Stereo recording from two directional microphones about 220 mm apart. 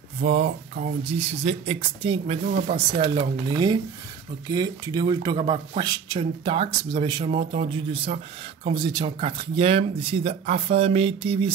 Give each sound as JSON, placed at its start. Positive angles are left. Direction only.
{"t": 0.2, "sound": "speech", "side_deg": -30}